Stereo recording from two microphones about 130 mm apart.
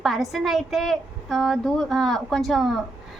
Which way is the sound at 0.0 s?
Centre (ahead or behind).